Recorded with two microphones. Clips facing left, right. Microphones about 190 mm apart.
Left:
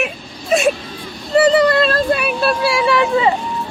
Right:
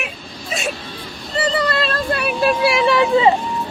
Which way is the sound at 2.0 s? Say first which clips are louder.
Left 3 dB; 15° left (ahead or behind).